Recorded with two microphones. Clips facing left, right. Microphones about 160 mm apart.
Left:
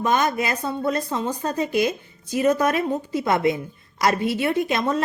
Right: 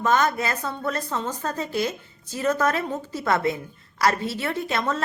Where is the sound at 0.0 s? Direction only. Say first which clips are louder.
Left 1 dB; 15° left (ahead or behind).